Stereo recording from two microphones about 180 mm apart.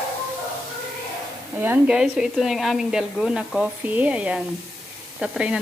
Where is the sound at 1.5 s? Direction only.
10° right (ahead or behind).